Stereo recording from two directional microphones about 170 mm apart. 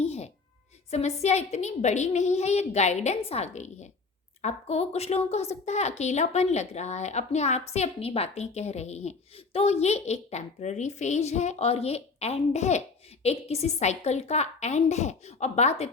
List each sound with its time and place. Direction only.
0.0 s music: 40° left (ahead or behind)
0.9 s a woman's voice: 40° left (ahead or behind)